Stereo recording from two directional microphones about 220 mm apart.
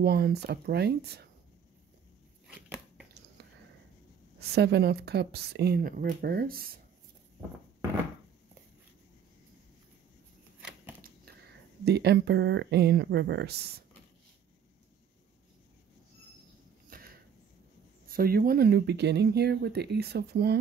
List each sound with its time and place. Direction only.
0.0 s speech: 45° right (ahead or behind)
2.4 s biting: centre (ahead or behind)
3.4 s whispering: 50° right (ahead or behind)
4.4 s speech: 50° right (ahead or behind)
11.8 s speech: 50° right (ahead or behind)
16.9 s a sound: 40° right (ahead or behind)
18.0 s speech: 40° right (ahead or behind)